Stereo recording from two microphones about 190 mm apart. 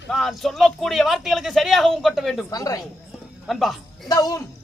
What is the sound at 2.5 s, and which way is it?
Speech, 20° left (ahead or behind).